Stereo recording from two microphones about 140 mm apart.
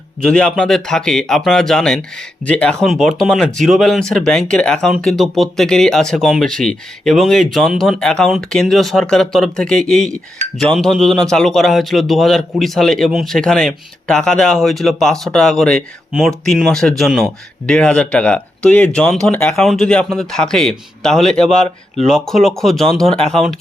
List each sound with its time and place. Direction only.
0.2 s a man's voice: 5° left (ahead or behind)